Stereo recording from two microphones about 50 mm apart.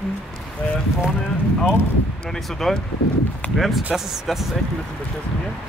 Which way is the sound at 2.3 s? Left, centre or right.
Centre.